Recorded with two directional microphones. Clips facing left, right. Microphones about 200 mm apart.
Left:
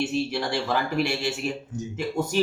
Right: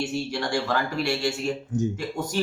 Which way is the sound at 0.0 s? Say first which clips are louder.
Left 2 dB; 5° left (ahead or behind).